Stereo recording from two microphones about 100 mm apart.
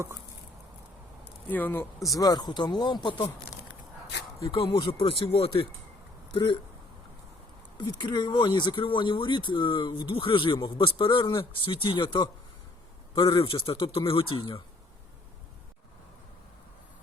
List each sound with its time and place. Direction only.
1.5 s speech: 20° left (ahead or behind)
2.0 s speech: 40° left (ahead or behind); by 3.2 s 55° left (ahead or behind)
4.5 s speech: 65° left (ahead or behind)
6.3 s speech: 55° left (ahead or behind)
7.8 s speech: 50° left (ahead or behind)